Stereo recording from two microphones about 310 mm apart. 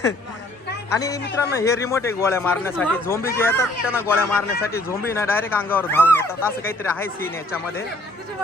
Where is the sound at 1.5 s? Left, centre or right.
Centre.